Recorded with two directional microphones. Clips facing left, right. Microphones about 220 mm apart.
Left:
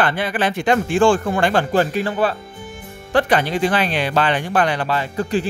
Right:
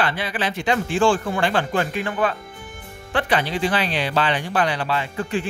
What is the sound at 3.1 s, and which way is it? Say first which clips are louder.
Speech: left 5 dB; 50° left (ahead or behind).